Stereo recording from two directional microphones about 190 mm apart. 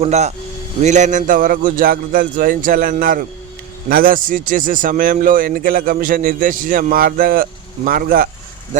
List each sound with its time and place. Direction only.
0.0 s a man's voice: 35° right (ahead or behind)
8.7 s speech: 40° right (ahead or behind)